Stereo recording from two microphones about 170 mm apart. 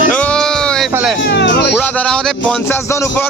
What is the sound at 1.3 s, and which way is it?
Speech, 80° left.